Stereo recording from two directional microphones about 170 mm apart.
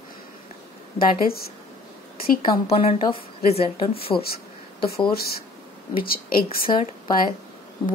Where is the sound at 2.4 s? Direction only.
35° left (ahead or behind).